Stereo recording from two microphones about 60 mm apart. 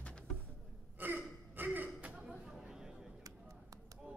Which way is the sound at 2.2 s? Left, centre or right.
Centre.